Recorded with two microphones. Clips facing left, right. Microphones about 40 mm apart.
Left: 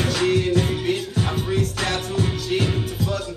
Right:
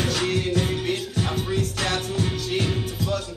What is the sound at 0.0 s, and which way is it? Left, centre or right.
Music, centre.